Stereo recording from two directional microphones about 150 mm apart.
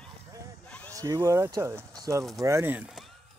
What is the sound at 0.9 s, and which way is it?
Speech, 20° right (ahead or behind).